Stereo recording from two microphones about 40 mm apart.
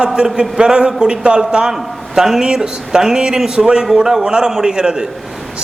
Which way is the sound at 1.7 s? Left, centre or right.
Centre.